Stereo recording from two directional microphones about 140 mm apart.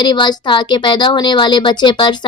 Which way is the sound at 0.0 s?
30° left (ahead or behind).